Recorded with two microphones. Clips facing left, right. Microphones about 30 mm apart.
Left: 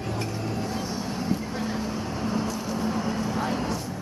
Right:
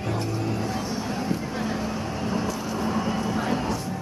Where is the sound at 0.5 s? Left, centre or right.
Centre.